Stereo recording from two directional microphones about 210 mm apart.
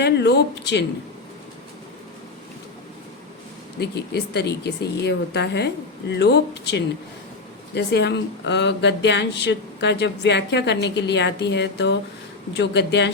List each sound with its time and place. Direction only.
0.0 s speech: 50° left (ahead or behind)
3.8 s speech: 50° left (ahead or behind)